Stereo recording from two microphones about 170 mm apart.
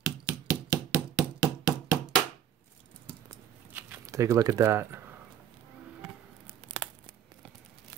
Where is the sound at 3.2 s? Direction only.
15° right (ahead or behind).